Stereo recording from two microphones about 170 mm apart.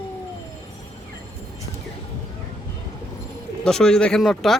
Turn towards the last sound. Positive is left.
turn(degrees=0)  # may be behind; listen again after turning